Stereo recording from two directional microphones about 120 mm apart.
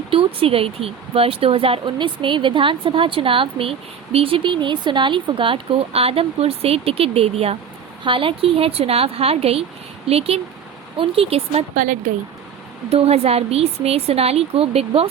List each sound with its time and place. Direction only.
0.1 s speech: 50° right (ahead or behind)
8.0 s a woman's voice: 45° right (ahead or behind)
11.7 s speech: 90° right
12.9 s a woman's voice: 55° right (ahead or behind)